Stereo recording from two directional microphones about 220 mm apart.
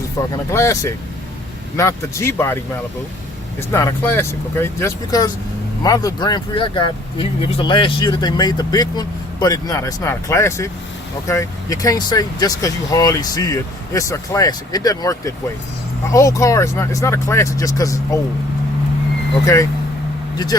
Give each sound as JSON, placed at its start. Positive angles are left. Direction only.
{"t": 0.2, "sound": "speech", "side_deg": 15}
{"t": 3.7, "sound": "speech", "side_deg": 15}